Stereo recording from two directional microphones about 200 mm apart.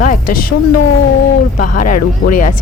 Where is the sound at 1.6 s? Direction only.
40° left (ahead or behind).